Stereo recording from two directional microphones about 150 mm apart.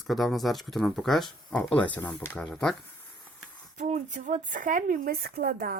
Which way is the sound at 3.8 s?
50° right (ahead or behind).